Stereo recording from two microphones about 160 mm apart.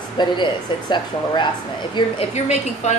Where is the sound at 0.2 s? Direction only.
30° left (ahead or behind).